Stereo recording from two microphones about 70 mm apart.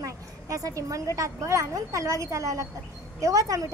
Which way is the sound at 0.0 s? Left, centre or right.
Right.